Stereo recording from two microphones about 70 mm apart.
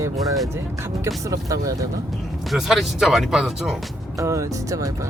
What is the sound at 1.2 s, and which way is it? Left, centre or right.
Speech, right.